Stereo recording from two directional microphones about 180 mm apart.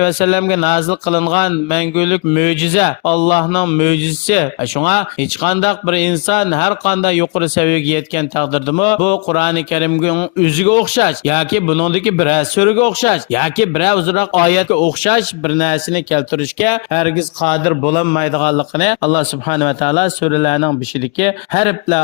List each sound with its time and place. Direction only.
0.0 s a man's voice: 45° left (ahead or behind)